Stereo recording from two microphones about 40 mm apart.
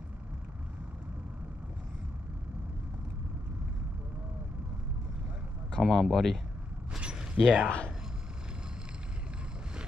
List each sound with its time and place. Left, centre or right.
5.8 s speech: centre
7.0 s mechanisms: right
7.3 s speech: centre